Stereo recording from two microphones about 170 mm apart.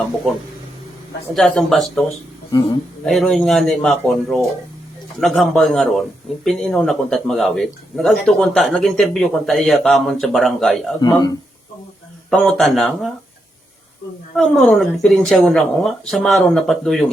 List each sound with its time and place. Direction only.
1.3 s a man's voice: centre (ahead or behind)
2.5 s speech: 20° left (ahead or behind)
3.1 s a man's voice: centre (ahead or behind)
11.0 s speech: 20° left (ahead or behind)
12.3 s a man's voice: centre (ahead or behind)
14.3 s a man's voice: centre (ahead or behind)